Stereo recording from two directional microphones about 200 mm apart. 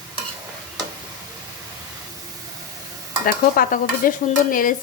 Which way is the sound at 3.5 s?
45° left (ahead or behind).